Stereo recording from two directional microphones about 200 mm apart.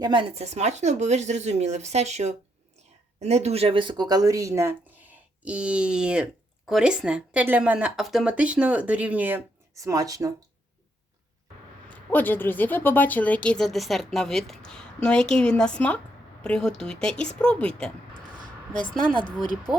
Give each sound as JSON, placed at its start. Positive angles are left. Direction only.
{"t": 0.0, "sound": "speech", "side_deg": -25}
{"t": 11.9, "sound": "speech", "side_deg": 10}
{"t": 19.1, "sound": "speech", "side_deg": 20}